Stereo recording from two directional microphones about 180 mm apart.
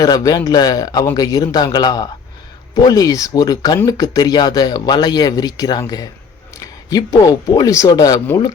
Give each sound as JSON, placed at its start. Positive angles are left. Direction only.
{"t": 0.0, "sound": "speech", "side_deg": 20}